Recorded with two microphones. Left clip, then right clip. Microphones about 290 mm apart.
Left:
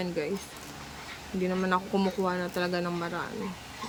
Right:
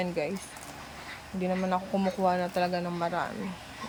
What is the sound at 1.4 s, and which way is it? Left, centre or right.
Speech, centre.